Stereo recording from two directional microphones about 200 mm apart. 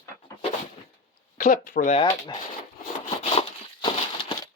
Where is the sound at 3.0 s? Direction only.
30° left (ahead or behind).